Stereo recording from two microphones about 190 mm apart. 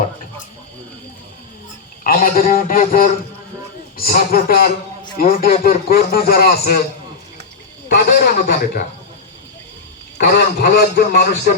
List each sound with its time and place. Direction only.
2.0 s a man's voice: 45° left (ahead or behind)
7.9 s a man's voice: 60° left (ahead or behind)
10.2 s a man's voice: 55° left (ahead or behind)